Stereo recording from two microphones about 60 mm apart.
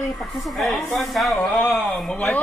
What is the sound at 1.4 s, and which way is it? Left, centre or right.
Speech, centre.